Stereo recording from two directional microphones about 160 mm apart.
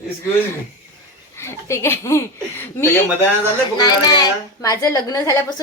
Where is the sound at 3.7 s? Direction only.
25° left (ahead or behind).